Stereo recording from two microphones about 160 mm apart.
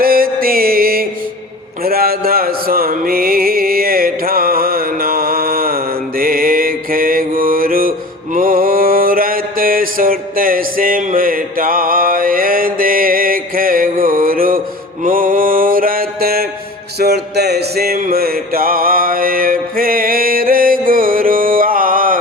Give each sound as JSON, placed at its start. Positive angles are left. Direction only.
{"t": 0.0, "sound": "music", "side_deg": -65}
{"t": 15.0, "sound": "mantra", "side_deg": -60}
{"t": 17.0, "sound": "music", "side_deg": -90}